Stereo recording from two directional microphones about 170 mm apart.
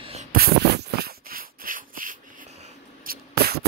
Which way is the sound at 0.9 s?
60° right (ahead or behind).